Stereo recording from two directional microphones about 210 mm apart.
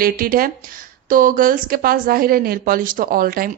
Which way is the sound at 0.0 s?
45° right (ahead or behind).